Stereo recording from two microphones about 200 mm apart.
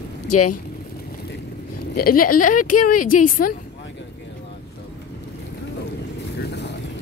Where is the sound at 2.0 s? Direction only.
45° left (ahead or behind).